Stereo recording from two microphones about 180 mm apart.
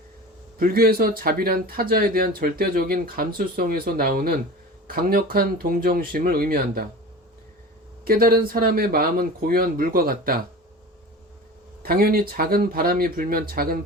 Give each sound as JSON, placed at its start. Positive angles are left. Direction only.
{"t": 0.6, "sound": "speech", "side_deg": -55}
{"t": 8.0, "sound": "speech", "side_deg": -55}
{"t": 11.8, "sound": "speech", "side_deg": -55}